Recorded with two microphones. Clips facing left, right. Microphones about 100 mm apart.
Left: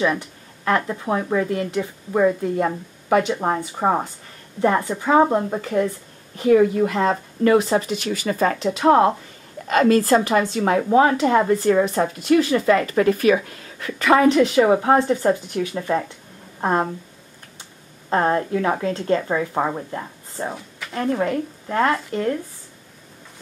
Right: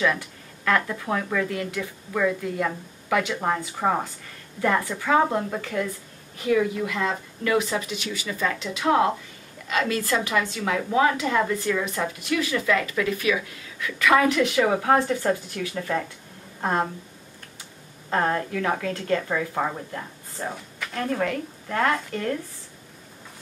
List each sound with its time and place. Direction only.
0.7 s a woman's voice: 25° left (ahead or behind)
18.1 s speech: 25° left (ahead or behind)